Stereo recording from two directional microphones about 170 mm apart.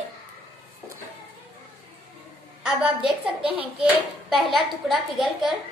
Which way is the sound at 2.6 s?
5° right (ahead or behind).